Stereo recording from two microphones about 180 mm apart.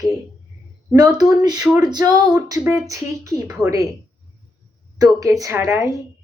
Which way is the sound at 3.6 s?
15° right (ahead or behind).